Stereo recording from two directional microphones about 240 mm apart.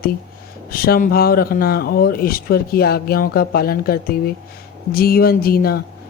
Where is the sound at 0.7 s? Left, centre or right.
Left.